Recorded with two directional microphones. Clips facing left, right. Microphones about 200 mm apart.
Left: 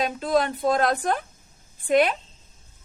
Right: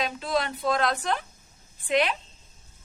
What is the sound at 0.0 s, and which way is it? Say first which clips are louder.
Speech: left 5 dB; 50° left (ahead or behind).